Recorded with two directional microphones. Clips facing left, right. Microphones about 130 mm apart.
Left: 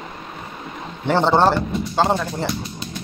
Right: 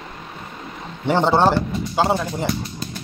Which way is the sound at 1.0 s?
10° right (ahead or behind).